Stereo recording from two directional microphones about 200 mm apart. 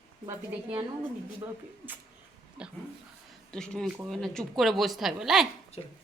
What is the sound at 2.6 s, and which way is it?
Speech, 5° right (ahead or behind).